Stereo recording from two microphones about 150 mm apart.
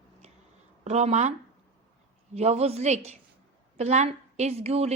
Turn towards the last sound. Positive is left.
turn(degrees=-45)  # may be behind; listen again after turning